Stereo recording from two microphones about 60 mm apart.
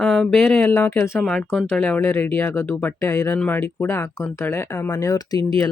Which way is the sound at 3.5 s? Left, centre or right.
Left.